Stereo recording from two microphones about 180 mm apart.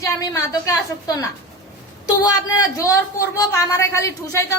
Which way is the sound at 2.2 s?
20° left (ahead or behind).